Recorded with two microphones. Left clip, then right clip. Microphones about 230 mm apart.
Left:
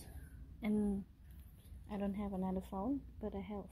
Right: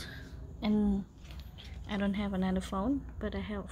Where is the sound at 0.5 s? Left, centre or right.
Centre.